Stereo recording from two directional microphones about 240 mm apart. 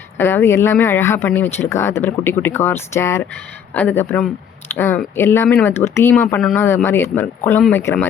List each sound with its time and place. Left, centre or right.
0.2 s speech: centre